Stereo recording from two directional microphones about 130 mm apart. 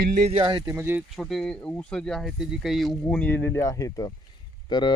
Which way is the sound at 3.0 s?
15° left (ahead or behind).